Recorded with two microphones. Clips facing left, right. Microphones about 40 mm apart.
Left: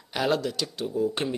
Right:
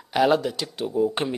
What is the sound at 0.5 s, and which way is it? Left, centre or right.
Speech, right.